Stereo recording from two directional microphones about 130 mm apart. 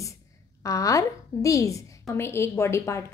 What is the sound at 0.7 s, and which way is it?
A woman's voice, 25° left (ahead or behind).